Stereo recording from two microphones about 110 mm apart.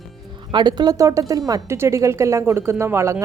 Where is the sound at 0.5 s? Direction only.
40° right (ahead or behind).